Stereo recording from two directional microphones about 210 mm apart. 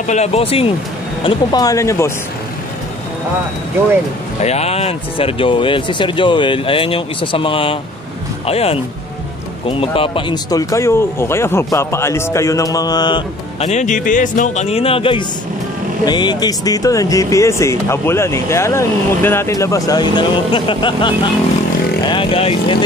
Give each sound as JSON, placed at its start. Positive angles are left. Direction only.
{"t": 0.0, "sound": "speech", "side_deg": 30}
{"t": 4.4, "sound": "speech", "side_deg": 30}